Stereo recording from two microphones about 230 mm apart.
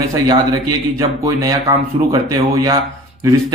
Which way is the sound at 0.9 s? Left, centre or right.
Centre.